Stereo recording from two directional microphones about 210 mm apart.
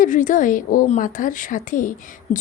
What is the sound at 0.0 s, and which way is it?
A woman's voice, 40° left (ahead or behind).